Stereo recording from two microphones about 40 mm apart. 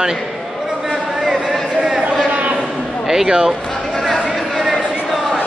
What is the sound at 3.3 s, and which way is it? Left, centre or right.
Speech, centre.